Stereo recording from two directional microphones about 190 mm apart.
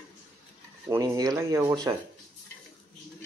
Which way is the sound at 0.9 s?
20° right (ahead or behind).